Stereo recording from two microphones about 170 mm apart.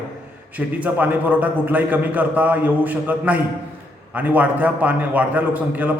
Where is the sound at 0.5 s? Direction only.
10° right (ahead or behind).